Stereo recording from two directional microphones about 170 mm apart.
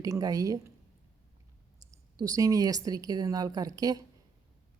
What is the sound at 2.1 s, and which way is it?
Speech, 20° right (ahead or behind).